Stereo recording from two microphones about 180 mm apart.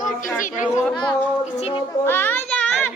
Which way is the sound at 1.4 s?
35° left (ahead or behind).